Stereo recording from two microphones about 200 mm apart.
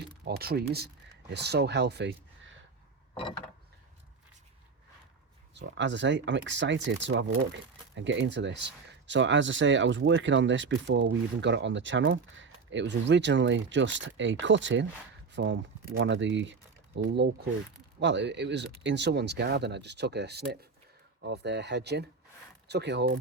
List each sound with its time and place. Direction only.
0.3 s speech: 50° right (ahead or behind)
5.5 s speech: 60° right (ahead or behind)